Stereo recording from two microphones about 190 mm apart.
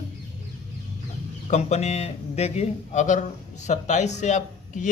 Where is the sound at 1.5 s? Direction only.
35° left (ahead or behind).